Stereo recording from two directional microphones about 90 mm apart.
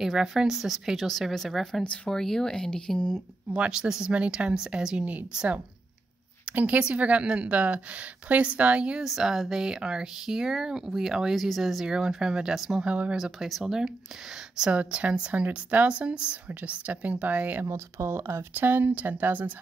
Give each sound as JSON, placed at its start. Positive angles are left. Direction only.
{"t": 0.0, "sound": "speech", "side_deg": -5}
{"t": 3.5, "sound": "a woman's voice", "side_deg": -10}
{"t": 17.6, "sound": "speech", "side_deg": -30}